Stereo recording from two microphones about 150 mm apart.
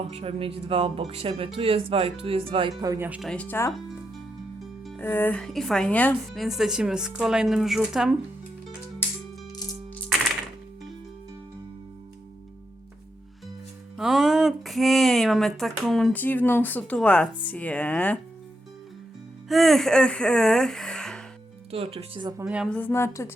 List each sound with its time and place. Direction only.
0.1 s speech: 40° right (ahead or behind)
3.2 s speech: 5° left (ahead or behind)
4.9 s speech: 15° left (ahead or behind)
6.4 s speech: centre (ahead or behind)
13.9 s speech: centre (ahead or behind)
16.1 s speech: 10° left (ahead or behind)
19.5 s speech: centre (ahead or behind)
21.7 s speech: 40° right (ahead or behind)
22.4 s a woman's voice: 5° right (ahead or behind)
22.7 s speech: 15° left (ahead or behind)